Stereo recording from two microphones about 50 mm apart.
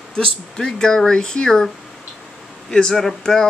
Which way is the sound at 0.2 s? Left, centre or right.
Centre.